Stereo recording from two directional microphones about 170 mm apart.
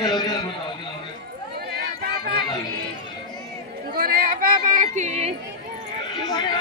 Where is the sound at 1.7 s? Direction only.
65° right (ahead or behind).